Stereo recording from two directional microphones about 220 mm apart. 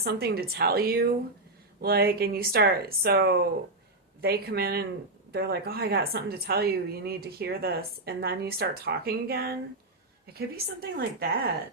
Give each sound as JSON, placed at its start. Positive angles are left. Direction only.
{"t": 0.0, "sound": "a woman's voice", "side_deg": -45}